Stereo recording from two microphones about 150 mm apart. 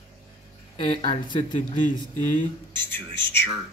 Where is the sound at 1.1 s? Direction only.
40° left (ahead or behind).